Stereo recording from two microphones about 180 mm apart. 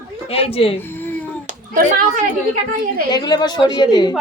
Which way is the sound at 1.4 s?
45° right (ahead or behind).